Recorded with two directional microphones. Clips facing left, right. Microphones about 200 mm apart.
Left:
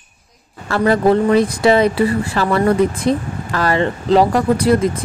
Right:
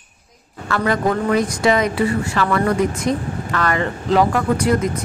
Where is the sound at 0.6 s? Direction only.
30° left (ahead or behind).